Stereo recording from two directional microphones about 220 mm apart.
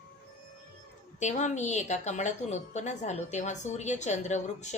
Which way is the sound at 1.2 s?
35° left (ahead or behind).